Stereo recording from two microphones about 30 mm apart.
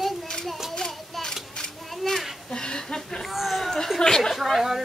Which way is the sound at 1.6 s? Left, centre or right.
Left.